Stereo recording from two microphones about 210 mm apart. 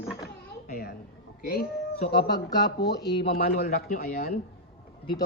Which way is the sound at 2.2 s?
20° left (ahead or behind).